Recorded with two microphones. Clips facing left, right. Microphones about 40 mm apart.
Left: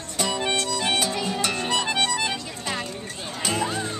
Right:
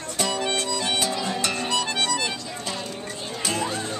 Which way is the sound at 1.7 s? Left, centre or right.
Left.